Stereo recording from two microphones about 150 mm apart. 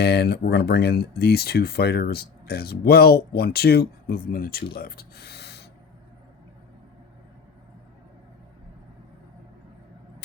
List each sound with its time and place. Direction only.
0.0 s speech: 90° left